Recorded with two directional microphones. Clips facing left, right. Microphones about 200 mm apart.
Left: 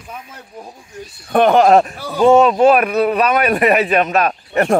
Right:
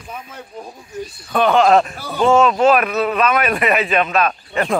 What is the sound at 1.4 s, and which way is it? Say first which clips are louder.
Speech: left 2 dB; 20° left (ahead or behind).